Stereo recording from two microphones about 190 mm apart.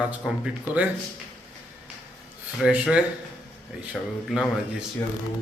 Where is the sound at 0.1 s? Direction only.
5° right (ahead or behind).